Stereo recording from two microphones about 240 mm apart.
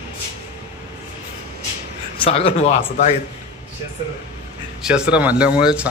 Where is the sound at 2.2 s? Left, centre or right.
Left.